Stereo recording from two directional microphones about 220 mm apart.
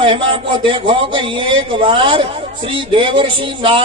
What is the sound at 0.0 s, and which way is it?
A man's voice, 25° right (ahead or behind).